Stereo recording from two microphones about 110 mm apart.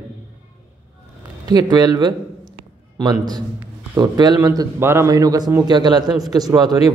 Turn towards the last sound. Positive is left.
turn(degrees=-40)  # may be behind; listen again after turning